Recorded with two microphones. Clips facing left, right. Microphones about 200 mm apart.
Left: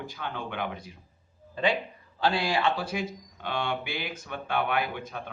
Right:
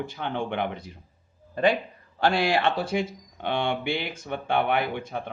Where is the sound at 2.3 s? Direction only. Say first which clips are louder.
Right 3 dB; 65° right (ahead or behind).